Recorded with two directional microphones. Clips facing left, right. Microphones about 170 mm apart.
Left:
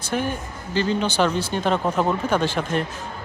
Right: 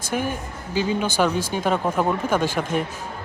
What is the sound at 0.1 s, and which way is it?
Speech, 10° right (ahead or behind).